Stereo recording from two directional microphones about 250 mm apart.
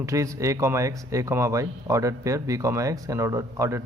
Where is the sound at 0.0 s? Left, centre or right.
Centre.